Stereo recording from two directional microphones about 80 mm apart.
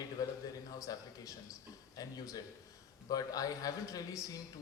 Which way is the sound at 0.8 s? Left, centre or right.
Left.